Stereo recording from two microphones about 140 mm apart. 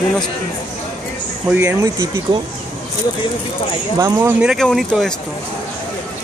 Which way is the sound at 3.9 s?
20° right (ahead or behind).